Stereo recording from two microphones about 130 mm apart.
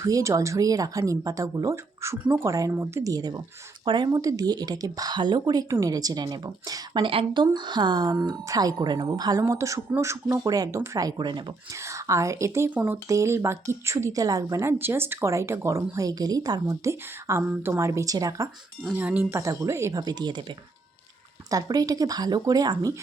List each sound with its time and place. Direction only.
0.0 s speech: 25° right (ahead or behind)
7.0 s speech: 40° right (ahead or behind)
11.7 s speech: 25° right (ahead or behind)
18.9 s speech: 15° right (ahead or behind)
19.4 s speech: 25° right (ahead or behind)